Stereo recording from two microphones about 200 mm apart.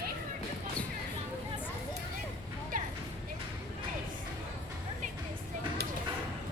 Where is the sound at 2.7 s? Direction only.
45° right (ahead or behind).